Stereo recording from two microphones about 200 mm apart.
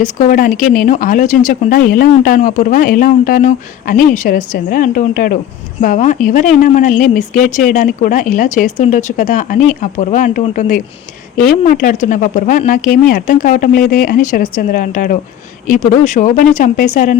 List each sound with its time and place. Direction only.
0.0 s speech: 40° left (ahead or behind)